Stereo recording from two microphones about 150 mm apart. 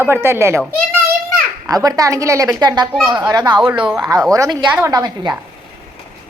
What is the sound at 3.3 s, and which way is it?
A woman's voice, 30° right (ahead or behind).